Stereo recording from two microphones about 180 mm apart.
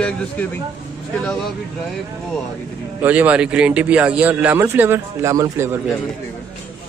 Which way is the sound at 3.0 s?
10° right (ahead or behind).